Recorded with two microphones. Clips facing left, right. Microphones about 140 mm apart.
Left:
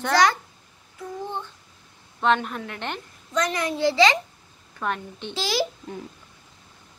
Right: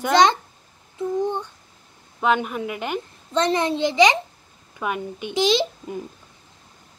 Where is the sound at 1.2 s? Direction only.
15° right (ahead or behind).